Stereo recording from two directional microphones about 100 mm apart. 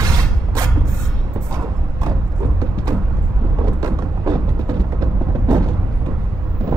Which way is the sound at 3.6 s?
35° right (ahead or behind).